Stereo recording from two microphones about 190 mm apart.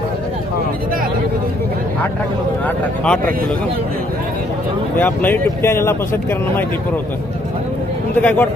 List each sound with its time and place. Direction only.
2.6 s speech: 5° left (ahead or behind)
4.9 s speech: 10° left (ahead or behind)
8.2 s speech: 5° left (ahead or behind)